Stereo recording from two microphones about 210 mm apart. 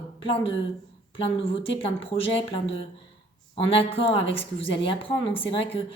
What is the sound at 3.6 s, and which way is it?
A woman's voice, 25° left (ahead or behind).